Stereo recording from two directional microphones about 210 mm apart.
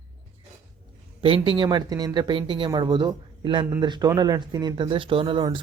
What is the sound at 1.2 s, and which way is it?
Speech, 25° right (ahead or behind).